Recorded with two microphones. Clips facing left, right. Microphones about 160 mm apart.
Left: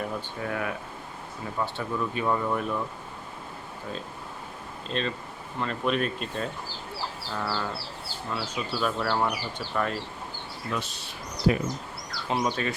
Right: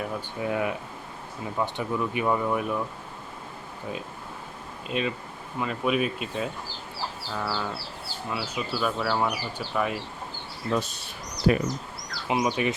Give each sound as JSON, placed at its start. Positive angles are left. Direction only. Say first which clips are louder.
{"t": 0.3, "sound": "speech", "louder": "right 6 dB", "side_deg": -20}
{"t": 4.9, "sound": "speech", "louder": "right 2 dB", "side_deg": -10}
{"t": 10.7, "sound": "speech", "louder": "right 6 dB", "side_deg": -45}
{"t": 11.5, "sound": "speech", "louder": "right 2 dB", "side_deg": -60}
{"t": 12.4, "sound": "speech", "louder": "right 3 dB", "side_deg": -10}